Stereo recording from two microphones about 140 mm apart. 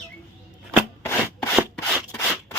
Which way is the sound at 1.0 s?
20° left (ahead or behind).